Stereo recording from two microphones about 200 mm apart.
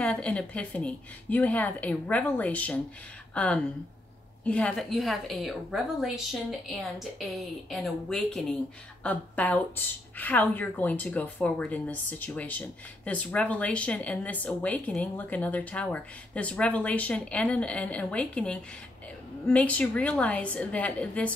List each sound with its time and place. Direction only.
0.0 s a woman's voice: 5° left (ahead or behind)